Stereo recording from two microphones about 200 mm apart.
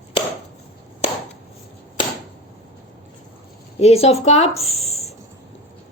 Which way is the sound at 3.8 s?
30° left (ahead or behind).